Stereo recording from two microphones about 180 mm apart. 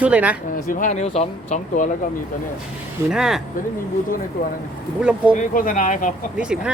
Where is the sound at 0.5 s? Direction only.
45° left (ahead or behind).